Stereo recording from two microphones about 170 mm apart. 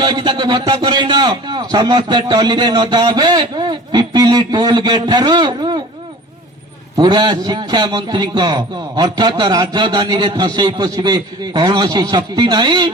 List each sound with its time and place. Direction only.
0.0 s a man's voice: 25° right (ahead or behind)
6.9 s a man's voice: 25° right (ahead or behind)